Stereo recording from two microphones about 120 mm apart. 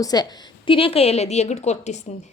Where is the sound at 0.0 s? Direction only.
35° left (ahead or behind).